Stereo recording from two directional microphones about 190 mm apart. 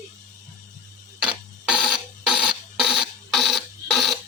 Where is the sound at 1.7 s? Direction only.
5° right (ahead or behind).